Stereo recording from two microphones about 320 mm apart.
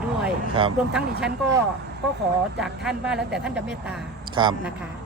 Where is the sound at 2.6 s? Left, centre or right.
Centre.